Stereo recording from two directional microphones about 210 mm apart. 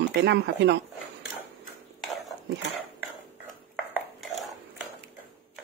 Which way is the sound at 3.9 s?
Centre (ahead or behind).